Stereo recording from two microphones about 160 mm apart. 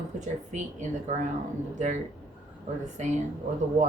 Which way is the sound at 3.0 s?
50° right (ahead or behind).